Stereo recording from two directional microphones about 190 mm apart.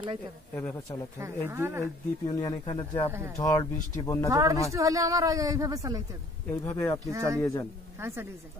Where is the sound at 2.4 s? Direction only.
25° left (ahead or behind).